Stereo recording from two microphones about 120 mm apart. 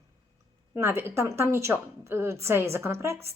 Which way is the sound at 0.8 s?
20° right (ahead or behind).